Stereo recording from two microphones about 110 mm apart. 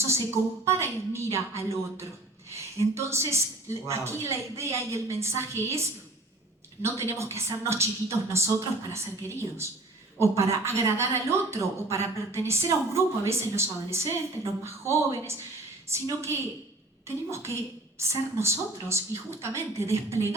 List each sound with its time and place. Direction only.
0.6 s a woman's voice: 25° right (ahead or behind)
6.8 s a woman's voice: 25° right (ahead or behind)
17.3 s a woman's voice: 25° right (ahead or behind)